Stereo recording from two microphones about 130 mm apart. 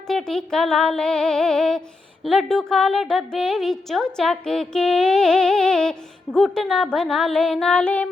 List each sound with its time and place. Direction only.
0.1 s a woman's voice: 5° left (ahead or behind)